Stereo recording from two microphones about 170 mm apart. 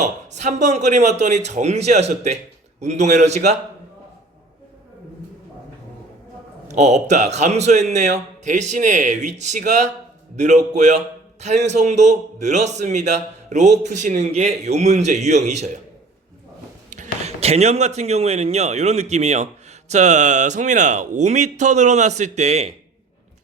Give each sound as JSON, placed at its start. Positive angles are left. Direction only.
{"t": 0.0, "sound": "a man's voice", "side_deg": -45}
{"t": 6.7, "sound": "a man's voice", "side_deg": -45}
{"t": 16.9, "sound": "a man's voice", "side_deg": -45}